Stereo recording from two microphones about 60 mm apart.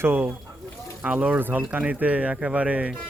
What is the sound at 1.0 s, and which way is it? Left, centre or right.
Speech, right.